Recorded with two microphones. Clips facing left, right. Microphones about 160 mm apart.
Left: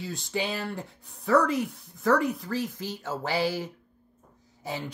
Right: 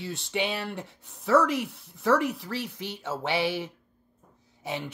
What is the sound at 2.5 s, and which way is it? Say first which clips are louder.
Speech: left 3 dB; 70° right (ahead or behind).